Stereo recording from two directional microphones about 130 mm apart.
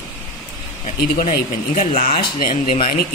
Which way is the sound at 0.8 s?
85° left.